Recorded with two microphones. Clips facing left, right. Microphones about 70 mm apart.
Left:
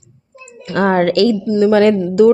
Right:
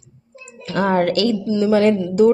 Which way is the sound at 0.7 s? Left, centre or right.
Left.